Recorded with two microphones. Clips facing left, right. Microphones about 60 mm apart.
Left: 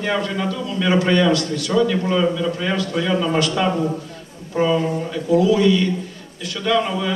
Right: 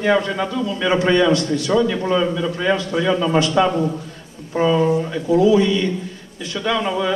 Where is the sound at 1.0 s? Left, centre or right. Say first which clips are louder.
Right 1 dB; right.